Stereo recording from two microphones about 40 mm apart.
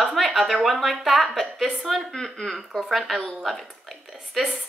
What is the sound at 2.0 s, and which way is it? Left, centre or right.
Speech, centre.